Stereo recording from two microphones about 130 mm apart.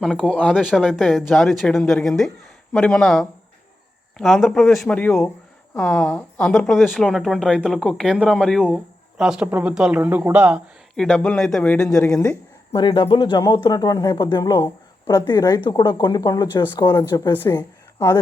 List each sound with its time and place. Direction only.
0.0 s speech: 5° left (ahead or behind)
0.6 s a woman's voice: centre (ahead or behind)
6.5 s speech: 5° left (ahead or behind)
10.9 s speech: 5° left (ahead or behind)
12.7 s speech: 35° left (ahead or behind)